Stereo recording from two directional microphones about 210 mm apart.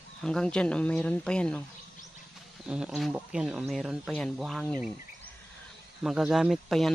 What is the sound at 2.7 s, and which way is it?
Speech, 5° right (ahead or behind).